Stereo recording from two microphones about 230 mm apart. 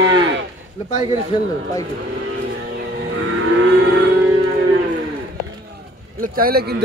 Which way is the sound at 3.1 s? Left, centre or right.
Right.